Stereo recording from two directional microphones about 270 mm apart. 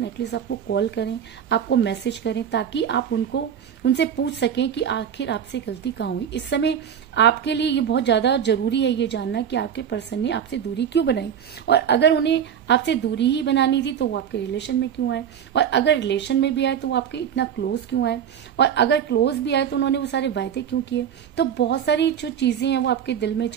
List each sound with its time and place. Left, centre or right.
0.0 s a woman's voice: left